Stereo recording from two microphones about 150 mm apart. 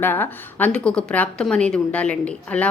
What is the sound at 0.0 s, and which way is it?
A woman's voice, 15° left (ahead or behind).